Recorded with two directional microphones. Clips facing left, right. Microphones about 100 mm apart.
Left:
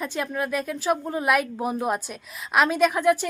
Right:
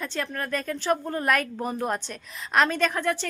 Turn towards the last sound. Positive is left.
turn(degrees=10)  # may be behind; listen again after turning